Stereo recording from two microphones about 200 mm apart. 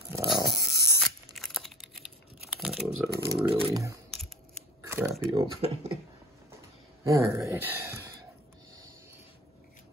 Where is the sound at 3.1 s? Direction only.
50° right (ahead or behind).